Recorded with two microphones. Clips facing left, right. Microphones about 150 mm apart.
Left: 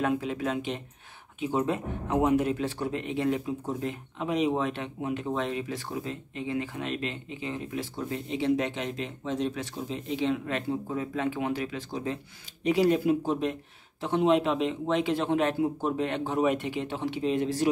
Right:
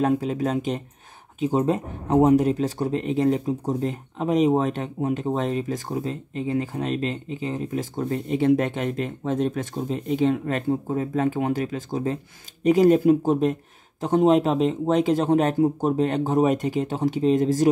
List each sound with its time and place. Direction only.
0.0 s speech: 40° right (ahead or behind)